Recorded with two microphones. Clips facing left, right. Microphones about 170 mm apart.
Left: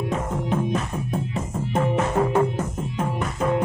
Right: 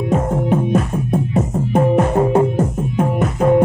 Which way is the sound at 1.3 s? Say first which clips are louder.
Right 10 dB; 55° right (ahead or behind).